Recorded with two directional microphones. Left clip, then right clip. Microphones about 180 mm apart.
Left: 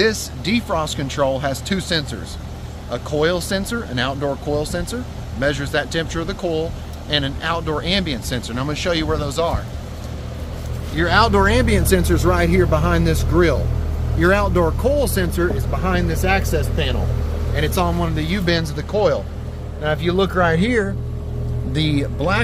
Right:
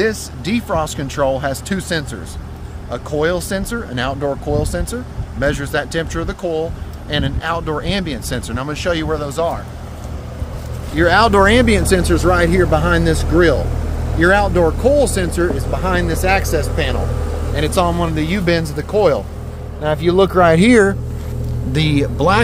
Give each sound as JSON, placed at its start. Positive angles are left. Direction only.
{"t": 0.0, "sound": "speech", "side_deg": -10}
{"t": 11.0, "sound": "speech", "side_deg": -55}
{"t": 11.6, "sound": "speech", "side_deg": -25}
{"t": 19.8, "sound": "speech", "side_deg": -35}
{"t": 20.4, "sound": "speech", "side_deg": -70}
{"t": 21.7, "sound": "speech", "side_deg": -45}